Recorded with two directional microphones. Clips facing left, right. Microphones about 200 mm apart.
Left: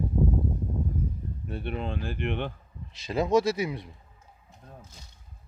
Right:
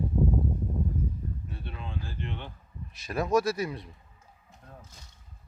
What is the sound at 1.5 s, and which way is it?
Speech, 65° left (ahead or behind).